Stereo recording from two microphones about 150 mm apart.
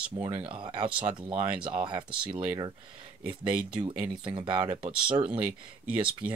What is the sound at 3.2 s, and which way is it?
Speech, 10° right (ahead or behind).